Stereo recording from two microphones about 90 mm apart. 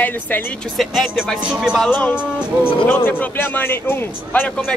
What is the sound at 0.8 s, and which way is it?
Speech, 5° left (ahead or behind).